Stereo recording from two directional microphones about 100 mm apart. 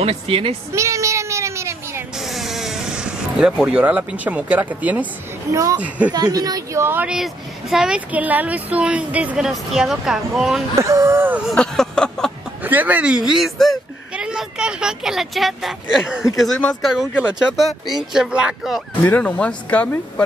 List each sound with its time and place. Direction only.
0.0 s a woman's voice: 75° right (ahead or behind)
0.7 s cat: 30° right (ahead or behind)
2.1 s vehicle: centre (ahead or behind)
5.5 s speech: 30° right (ahead or behind)
5.8 s speech: 15° right (ahead or behind)
6.1 s speech: 40° right (ahead or behind); by 7.1 s 25° right (ahead or behind)
7.7 s speech: 10° right (ahead or behind)
9.5 s a woman's voice: centre (ahead or behind)
10.8 s speech: 30° right (ahead or behind)
11.1 s a sound: 20° right (ahead or behind)
11.5 s a sound: 5° left (ahead or behind)
12.6 s a woman's voice: 15° right (ahead or behind)
19.0 s speech: 15° left (ahead or behind)